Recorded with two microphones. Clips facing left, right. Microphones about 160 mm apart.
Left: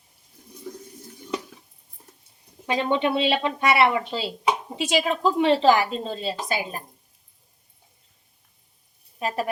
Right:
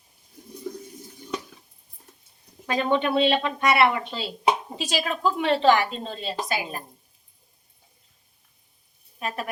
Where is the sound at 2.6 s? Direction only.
20° left (ahead or behind).